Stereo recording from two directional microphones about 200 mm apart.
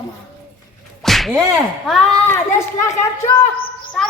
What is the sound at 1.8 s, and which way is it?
Speech, centre (ahead or behind).